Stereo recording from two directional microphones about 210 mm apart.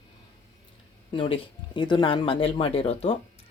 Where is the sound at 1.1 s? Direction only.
25° left (ahead or behind).